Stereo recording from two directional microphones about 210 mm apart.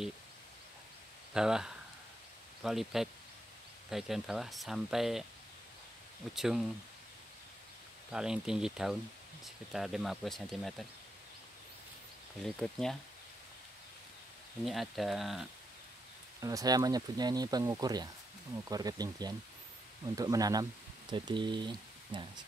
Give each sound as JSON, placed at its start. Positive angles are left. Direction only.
{"t": 1.3, "sound": "speech", "side_deg": -5}
{"t": 6.3, "sound": "speech", "side_deg": 0}
{"t": 8.1, "sound": "speech", "side_deg": -5}
{"t": 12.5, "sound": "speech", "side_deg": 0}
{"t": 14.6, "sound": "speech", "side_deg": 0}
{"t": 16.3, "sound": "speech", "side_deg": -15}